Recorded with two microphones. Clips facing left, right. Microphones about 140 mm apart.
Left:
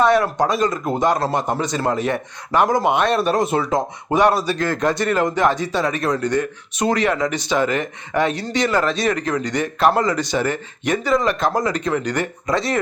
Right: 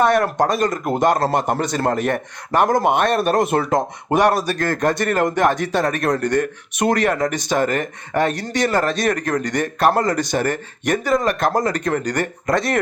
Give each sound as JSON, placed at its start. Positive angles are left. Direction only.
{"t": 0.0, "sound": "a man's voice", "side_deg": -50}
{"t": 4.1, "sound": "speech", "side_deg": -45}